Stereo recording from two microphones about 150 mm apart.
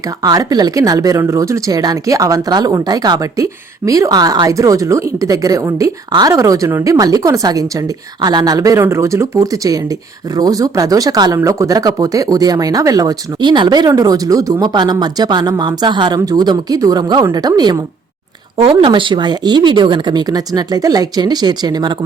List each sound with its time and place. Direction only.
0.2 s speech: 25° right (ahead or behind)
18.5 s speech: 35° right (ahead or behind)